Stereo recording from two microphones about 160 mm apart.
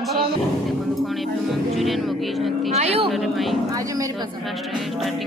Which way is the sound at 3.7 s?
20° right (ahead or behind).